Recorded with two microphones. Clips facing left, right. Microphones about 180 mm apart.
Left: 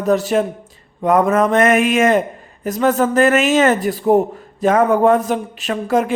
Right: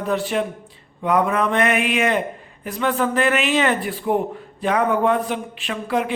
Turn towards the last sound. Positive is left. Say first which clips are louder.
# left 5 dB
turn(degrees=45)  # may be behind; listen again after turning